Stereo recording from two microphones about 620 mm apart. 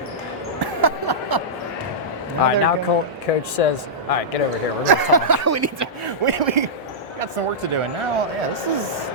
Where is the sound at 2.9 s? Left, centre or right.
Left.